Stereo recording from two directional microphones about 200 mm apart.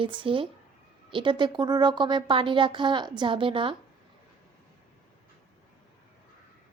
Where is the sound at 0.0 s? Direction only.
25° right (ahead or behind).